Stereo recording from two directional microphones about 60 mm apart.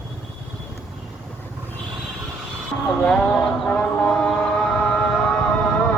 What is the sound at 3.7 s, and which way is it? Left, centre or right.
Music, centre.